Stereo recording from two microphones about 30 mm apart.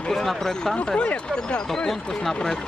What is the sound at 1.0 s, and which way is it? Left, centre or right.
Speech, left.